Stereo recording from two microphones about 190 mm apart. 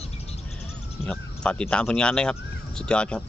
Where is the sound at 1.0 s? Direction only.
5° left (ahead or behind).